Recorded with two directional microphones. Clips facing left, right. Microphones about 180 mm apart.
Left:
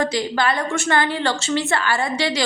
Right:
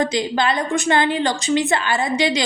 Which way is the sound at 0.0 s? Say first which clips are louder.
Right 1 dB; 20° right (ahead or behind).